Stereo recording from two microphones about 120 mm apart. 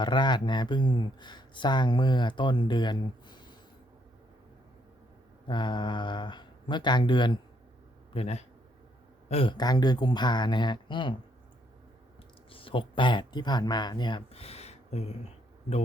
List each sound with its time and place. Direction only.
0.0 s speech: 40° left (ahead or behind)
5.5 s speech: 40° left (ahead or behind)
8.1 s speech: 60° left (ahead or behind)
9.3 s speech: 50° left (ahead or behind)
9.6 s speech: 35° left (ahead or behind)
12.5 s speech: 50° left (ahead or behind)